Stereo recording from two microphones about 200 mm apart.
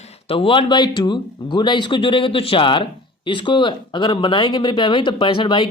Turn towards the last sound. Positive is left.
turn(degrees=25)  # may be behind; listen again after turning